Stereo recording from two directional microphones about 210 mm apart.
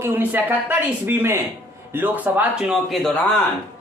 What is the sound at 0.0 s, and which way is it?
Speech, 10° right (ahead or behind).